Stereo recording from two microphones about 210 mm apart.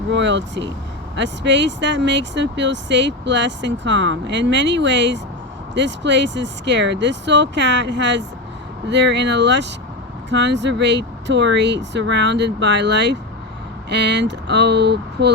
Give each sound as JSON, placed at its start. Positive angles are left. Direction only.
{"t": 0.1, "sound": "speech", "side_deg": -60}